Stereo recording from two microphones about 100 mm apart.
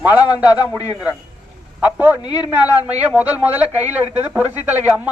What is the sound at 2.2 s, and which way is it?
Speech, 45° left (ahead or behind).